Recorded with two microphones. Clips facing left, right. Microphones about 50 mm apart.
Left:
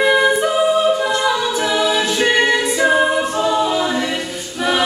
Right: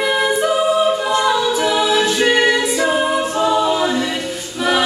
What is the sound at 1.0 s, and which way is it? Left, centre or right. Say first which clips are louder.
A capella: right 1 dB; centre.